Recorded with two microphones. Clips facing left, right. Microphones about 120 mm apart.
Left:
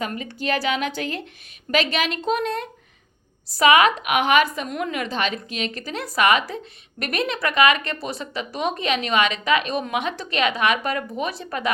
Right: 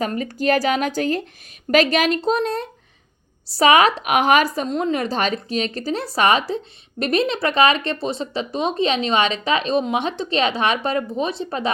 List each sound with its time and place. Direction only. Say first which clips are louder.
0.0 s a woman's voice: right 6 dB; 40° right (ahead or behind)